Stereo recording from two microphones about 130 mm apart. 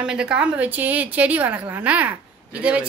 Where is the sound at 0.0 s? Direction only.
5° right (ahead or behind).